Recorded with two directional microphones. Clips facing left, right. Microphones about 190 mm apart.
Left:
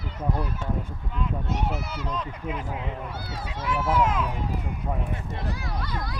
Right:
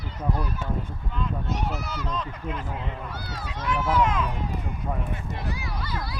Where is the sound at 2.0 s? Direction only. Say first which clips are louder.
Left 1 dB; 10° left (ahead or behind).